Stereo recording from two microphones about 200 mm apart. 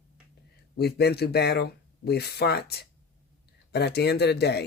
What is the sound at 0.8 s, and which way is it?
Speech, 55° left (ahead or behind).